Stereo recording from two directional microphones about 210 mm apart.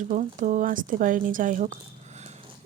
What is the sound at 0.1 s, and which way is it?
Speech, 35° right (ahead or behind).